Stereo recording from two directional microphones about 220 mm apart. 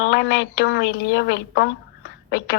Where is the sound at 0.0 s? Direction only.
45° left (ahead or behind).